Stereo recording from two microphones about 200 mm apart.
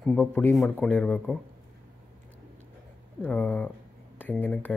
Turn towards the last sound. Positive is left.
turn(degrees=10)  # may be behind; listen again after turning